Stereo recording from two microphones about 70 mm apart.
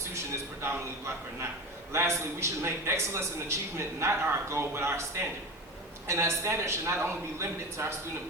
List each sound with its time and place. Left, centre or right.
1.9 s a man's voice: right